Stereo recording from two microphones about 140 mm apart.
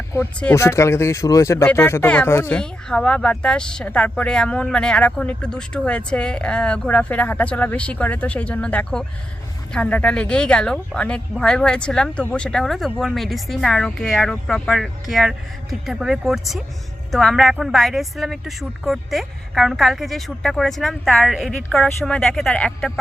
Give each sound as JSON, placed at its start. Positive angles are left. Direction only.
{"t": 0.5, "sound": "speech", "side_deg": 20}
{"t": 2.6, "sound": "a woman's voice", "side_deg": 5}